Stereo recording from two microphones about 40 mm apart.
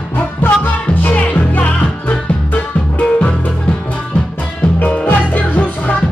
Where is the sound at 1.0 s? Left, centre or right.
Left.